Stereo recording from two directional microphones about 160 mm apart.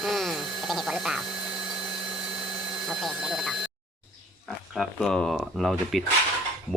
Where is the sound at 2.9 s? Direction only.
Centre (ahead or behind).